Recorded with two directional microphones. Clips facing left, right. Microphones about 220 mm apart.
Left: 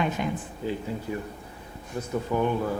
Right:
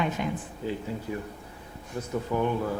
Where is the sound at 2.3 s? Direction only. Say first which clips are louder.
Left 1 dB; 35° left (ahead or behind).